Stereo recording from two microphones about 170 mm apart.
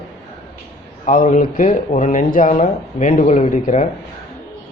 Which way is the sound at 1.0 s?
50° left (ahead or behind).